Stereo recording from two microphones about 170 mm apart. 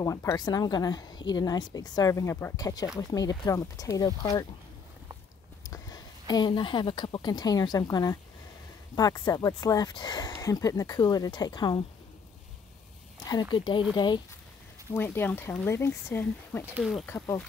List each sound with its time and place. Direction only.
0.0 s speech: 20° left (ahead or behind)
5.6 s speech: 20° left (ahead or behind)
13.2 s speech: 25° left (ahead or behind)
14.9 s speech: 15° left (ahead or behind)
16.6 s speech: 5° right (ahead or behind)
17.1 s speech: 15° left (ahead or behind)